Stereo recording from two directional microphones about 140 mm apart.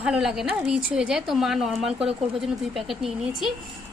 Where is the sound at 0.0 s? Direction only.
5° right (ahead or behind).